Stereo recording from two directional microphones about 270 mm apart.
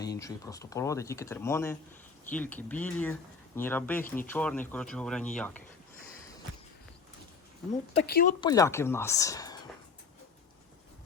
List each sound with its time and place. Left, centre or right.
0.0 s speech: centre
8.0 s speech: left
8.4 s speech: centre